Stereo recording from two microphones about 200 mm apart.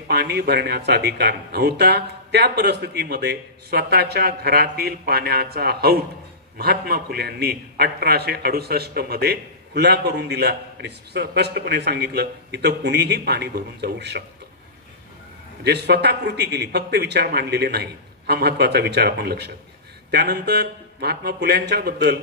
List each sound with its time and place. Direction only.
0.1 s a man's voice: 55° right (ahead or behind)
15.6 s a man's voice: 55° right (ahead or behind)